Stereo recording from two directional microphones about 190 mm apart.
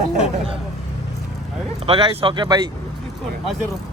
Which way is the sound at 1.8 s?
30° right (ahead or behind).